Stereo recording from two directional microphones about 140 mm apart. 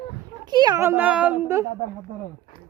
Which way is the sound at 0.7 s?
15° right (ahead or behind).